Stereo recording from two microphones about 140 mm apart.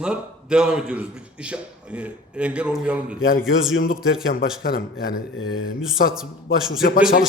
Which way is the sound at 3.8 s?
90° left.